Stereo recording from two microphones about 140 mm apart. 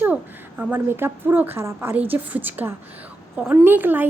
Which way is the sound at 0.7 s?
15° right (ahead or behind).